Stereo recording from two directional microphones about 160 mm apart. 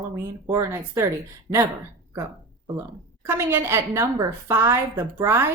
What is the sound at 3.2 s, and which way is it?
Speech, 15° right (ahead or behind).